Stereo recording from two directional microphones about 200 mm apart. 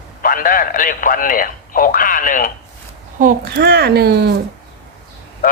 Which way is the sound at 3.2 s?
45° right (ahead or behind).